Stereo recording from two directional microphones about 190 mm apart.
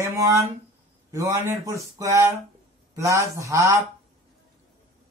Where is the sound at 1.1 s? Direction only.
15° right (ahead or behind).